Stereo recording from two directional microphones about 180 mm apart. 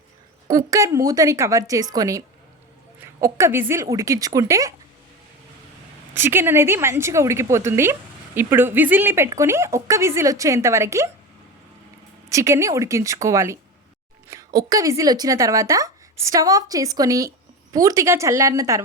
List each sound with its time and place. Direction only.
0.5 s a woman's voice: 20° right (ahead or behind)
6.1 s a woman's voice: 10° right (ahead or behind)
12.3 s a woman's voice: 15° right (ahead or behind)